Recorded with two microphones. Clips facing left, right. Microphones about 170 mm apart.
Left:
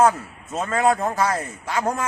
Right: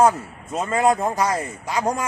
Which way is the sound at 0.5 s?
Centre (ahead or behind).